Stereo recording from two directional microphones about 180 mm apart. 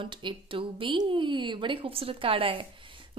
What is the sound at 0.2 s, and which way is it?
A woman's voice, 30° right (ahead or behind).